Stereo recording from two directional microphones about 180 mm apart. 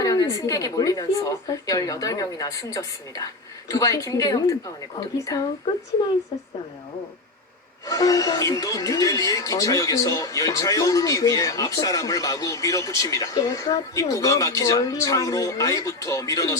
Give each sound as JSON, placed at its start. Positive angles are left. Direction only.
{"t": 0.0, "sound": "speech", "side_deg": 20}
{"t": 7.9, "sound": "speech", "side_deg": 20}